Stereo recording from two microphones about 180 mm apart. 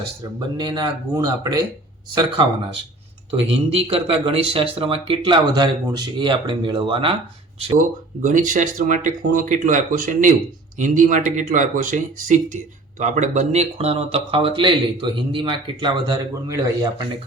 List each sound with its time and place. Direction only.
0.3 s speech: 25° right (ahead or behind)
7.8 s speech: 45° right (ahead or behind); by 16.9 s 20° right (ahead or behind)